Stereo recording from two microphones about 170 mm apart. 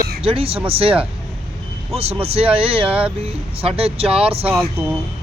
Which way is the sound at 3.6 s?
35° right (ahead or behind).